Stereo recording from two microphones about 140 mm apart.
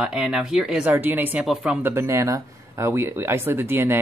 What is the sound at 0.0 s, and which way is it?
Speech, 5° right (ahead or behind).